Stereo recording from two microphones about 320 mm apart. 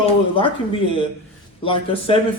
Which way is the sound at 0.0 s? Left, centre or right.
Centre.